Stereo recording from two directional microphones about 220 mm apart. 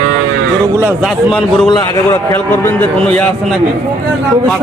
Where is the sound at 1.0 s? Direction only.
Centre (ahead or behind).